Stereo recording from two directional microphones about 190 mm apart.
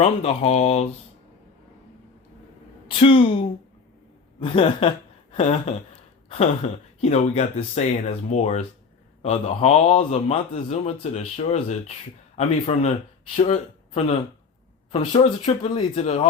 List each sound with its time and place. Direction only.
0.0 s a man's voice: 35° left (ahead or behind)
3.0 s speech: 30° left (ahead or behind)
6.2 s a sound: 30° left (ahead or behind)
7.0 s a man's voice: 35° left (ahead or behind)